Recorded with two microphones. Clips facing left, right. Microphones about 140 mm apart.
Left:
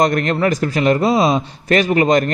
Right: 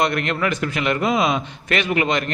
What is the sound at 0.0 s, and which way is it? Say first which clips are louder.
A man's voice: left 5 dB; 40° left (ahead or behind).